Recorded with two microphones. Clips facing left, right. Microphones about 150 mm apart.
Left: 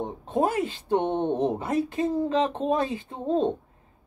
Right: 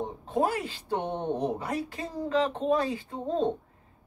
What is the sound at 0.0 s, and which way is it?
Speech, 20° left (ahead or behind).